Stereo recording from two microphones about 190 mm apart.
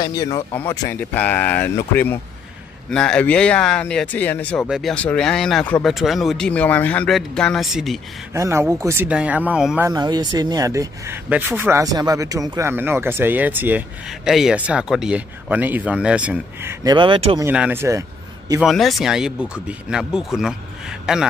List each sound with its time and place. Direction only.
0.0 s speech: 20° left (ahead or behind); by 8.0 s centre (ahead or behind)
8.3 s speech: 15° right (ahead or behind)
9.8 s speech: 20° right (ahead or behind)
16.8 s speech: 25° right (ahead or behind)
17.5 s speech: 10° right (ahead or behind)
18.6 s a man's voice: centre (ahead or behind)